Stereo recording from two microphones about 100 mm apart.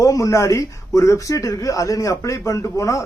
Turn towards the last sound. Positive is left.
turn(degrees=30)  # may be behind; listen again after turning